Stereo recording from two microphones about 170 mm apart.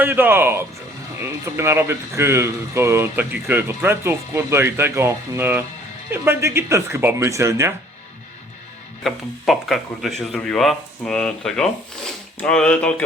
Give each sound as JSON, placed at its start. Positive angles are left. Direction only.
{"t": 0.0, "sound": "speech", "side_deg": -10}
{"t": 9.0, "sound": "speech", "side_deg": 0}